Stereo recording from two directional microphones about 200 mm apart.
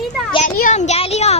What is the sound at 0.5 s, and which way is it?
Speech, 40° left (ahead or behind).